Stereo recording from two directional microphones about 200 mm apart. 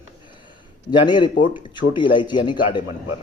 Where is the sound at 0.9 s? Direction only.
20° left (ahead or behind).